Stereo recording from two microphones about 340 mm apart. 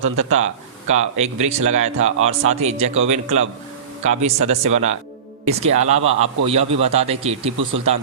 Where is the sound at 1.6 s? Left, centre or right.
Right.